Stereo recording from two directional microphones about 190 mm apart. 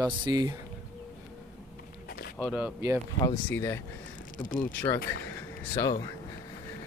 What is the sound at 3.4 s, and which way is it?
Speech, 15° left (ahead or behind).